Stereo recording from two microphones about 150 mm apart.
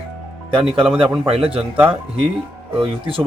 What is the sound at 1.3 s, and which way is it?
Speech, 40° right (ahead or behind).